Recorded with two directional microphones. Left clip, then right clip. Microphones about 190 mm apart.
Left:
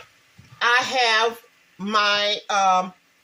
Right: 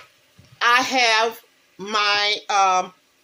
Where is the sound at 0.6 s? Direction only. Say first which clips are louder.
Right 2 dB; 35° right (ahead or behind).